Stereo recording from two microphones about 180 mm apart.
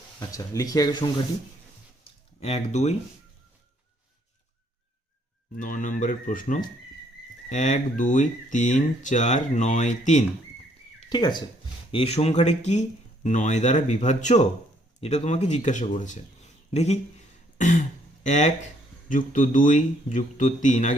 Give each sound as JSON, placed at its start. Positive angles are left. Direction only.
{"t": 0.2, "sound": "speech", "side_deg": 20}
{"t": 2.4, "sound": "speech", "side_deg": 35}
{"t": 5.5, "sound": "speech", "side_deg": 45}
{"t": 11.1, "sound": "speech", "side_deg": 25}